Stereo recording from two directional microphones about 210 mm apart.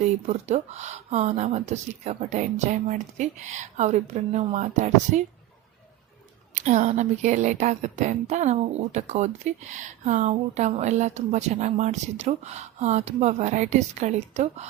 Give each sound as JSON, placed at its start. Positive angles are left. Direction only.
{"t": 0.3, "sound": "speech", "side_deg": -30}
{"t": 6.5, "sound": "speech", "side_deg": -35}